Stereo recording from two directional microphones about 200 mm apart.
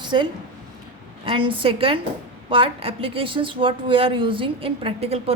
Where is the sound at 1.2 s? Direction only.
25° right (ahead or behind).